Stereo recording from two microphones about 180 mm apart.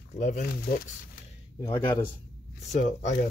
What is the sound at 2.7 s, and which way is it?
Speech, 45° left (ahead or behind).